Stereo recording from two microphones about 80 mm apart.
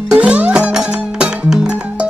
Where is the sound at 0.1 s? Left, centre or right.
Centre.